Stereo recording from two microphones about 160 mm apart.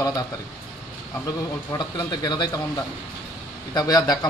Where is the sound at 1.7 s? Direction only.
25° left (ahead or behind).